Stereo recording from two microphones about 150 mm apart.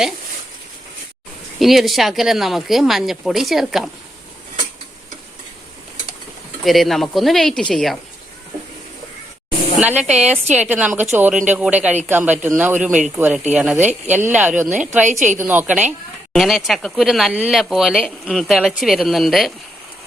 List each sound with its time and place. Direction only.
1.5 s speech: centre (ahead or behind)
6.7 s speech: centre (ahead or behind)
9.8 s speech: 10° right (ahead or behind)
15.0 s a woman's voice: 55° right (ahead or behind)
15.4 s speech: 10° right (ahead or behind)